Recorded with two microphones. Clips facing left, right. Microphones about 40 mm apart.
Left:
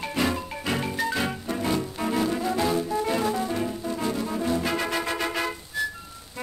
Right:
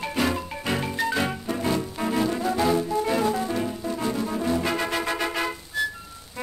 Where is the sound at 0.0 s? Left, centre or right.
Centre.